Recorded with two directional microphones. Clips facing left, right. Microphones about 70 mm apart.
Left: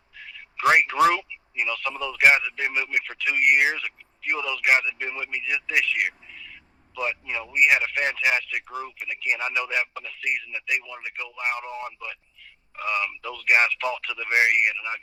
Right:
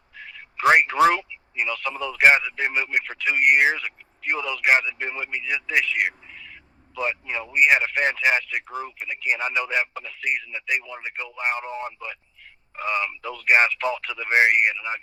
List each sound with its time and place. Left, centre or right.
0.2 s speech: right